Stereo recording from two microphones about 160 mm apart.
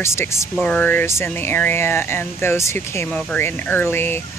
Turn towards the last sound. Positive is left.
turn(degrees=15)  # may be behind; listen again after turning